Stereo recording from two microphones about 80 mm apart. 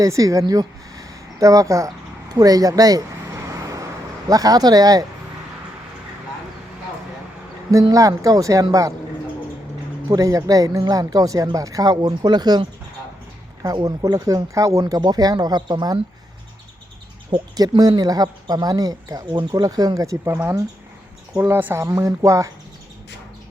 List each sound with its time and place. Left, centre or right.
0.0 s speech: right
2.3 s vehicle: right
4.3 s speech: right
7.7 s speech: right
10.1 s speech: right
13.8 s speech: right
17.6 s speech: right
19.3 s speech: right
19.6 s speech: right
21.3 s speech: right